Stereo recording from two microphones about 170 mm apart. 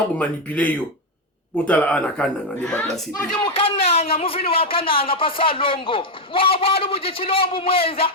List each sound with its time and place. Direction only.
0.2 s speech: 10° left (ahead or behind)
3.4 s speech: 35° left (ahead or behind)